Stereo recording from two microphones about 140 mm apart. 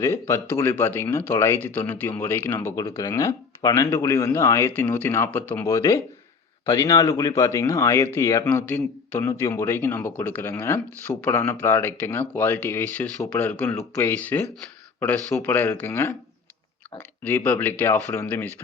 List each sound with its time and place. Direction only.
0.0 s speech: 20° left (ahead or behind)
2.7 s speech: 25° left (ahead or behind)
17.2 s speech: 15° left (ahead or behind)